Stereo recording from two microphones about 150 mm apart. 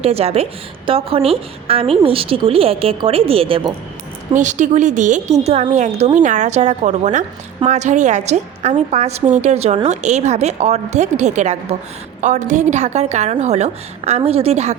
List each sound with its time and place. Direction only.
0.0 s a woman's voice: 40° right (ahead or behind)
4.4 s a woman's voice: 55° right (ahead or behind)